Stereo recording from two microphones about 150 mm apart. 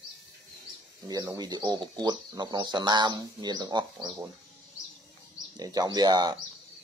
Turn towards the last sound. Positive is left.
turn(degrees=-25)  # may be behind; listen again after turning